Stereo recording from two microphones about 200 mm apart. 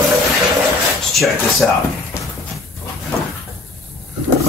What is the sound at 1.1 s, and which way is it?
Speech, centre (ahead or behind).